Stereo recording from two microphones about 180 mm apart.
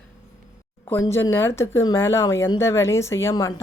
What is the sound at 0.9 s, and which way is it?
Speech, 15° left (ahead or behind).